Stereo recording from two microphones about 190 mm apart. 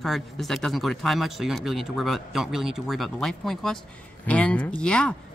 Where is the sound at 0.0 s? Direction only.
Centre (ahead or behind).